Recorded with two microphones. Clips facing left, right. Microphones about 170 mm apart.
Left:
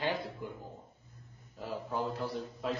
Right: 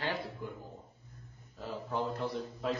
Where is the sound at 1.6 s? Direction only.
10° left (ahead or behind).